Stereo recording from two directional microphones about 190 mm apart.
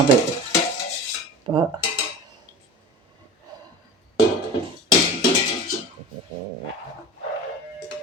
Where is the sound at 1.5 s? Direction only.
25° right (ahead or behind).